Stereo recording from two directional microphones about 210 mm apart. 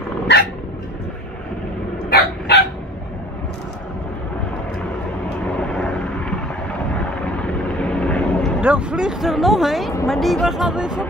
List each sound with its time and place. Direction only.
0.3 s dog: 55° left (ahead or behind)
2.0 s dog: 50° left (ahead or behind)
7.6 s vehicle: 5° left (ahead or behind)
10.0 s speech: centre (ahead or behind)